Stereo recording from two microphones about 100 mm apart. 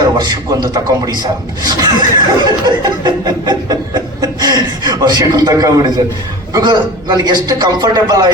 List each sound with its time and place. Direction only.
0.0 s speech: 45° right (ahead or behind)
4.2 s a sound: 40° right (ahead or behind)
6.5 s speech: 45° right (ahead or behind)